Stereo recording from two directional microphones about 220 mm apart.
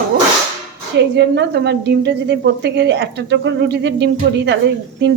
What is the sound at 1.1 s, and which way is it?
A woman's voice, 50° right (ahead or behind).